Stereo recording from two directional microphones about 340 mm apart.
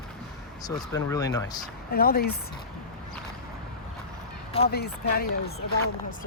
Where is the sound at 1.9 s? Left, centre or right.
Left.